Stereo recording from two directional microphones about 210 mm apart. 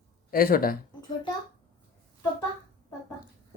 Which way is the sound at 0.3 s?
40° left (ahead or behind).